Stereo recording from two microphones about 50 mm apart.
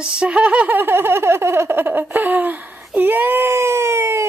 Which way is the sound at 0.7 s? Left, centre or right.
Right.